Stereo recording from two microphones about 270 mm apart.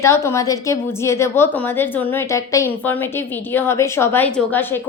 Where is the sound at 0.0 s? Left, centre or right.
Centre.